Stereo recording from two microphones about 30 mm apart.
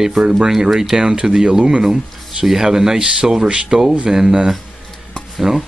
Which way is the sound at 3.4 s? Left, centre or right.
Right.